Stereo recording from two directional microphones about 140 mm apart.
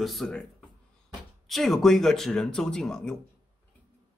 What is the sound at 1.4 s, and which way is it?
Speech, centre (ahead or behind).